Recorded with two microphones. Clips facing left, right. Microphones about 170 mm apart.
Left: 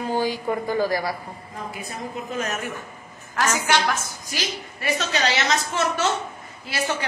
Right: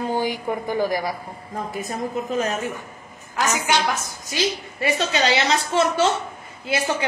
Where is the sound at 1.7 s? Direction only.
40° right (ahead or behind).